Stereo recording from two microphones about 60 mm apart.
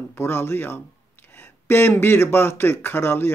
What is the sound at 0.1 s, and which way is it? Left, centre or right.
Speech, left.